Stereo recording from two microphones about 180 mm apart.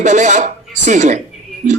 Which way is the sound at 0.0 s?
40° right (ahead or behind).